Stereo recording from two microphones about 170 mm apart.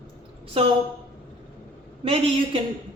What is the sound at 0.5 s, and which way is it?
Speech, 35° right (ahead or behind).